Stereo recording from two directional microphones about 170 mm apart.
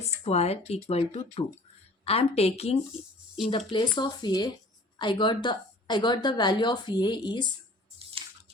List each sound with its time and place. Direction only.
0.0 s speech: 40° left (ahead or behind)
3.7 s a woman's voice: 25° left (ahead or behind)